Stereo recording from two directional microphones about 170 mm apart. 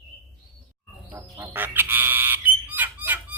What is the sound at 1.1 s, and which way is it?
Squawk, 15° right (ahead or behind).